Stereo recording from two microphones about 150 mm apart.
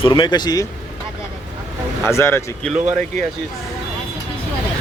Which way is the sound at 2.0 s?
15° left (ahead or behind).